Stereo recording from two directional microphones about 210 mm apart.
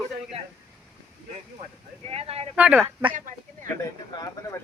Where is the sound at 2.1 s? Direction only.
30° right (ahead or behind).